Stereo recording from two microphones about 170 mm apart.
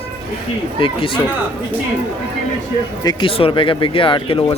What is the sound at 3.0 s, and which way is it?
A man's voice, 30° left (ahead or behind).